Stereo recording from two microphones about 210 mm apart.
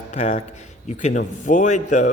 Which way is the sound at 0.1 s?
35° left (ahead or behind).